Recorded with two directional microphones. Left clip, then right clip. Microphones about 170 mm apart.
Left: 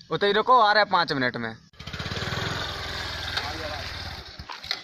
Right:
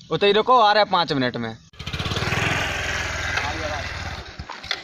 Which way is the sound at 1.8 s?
50° right (ahead or behind).